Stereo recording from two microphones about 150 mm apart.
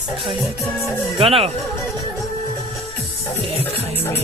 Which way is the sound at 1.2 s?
40° right (ahead or behind).